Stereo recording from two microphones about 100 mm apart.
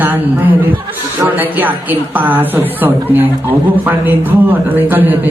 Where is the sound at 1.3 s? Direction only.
15° right (ahead or behind).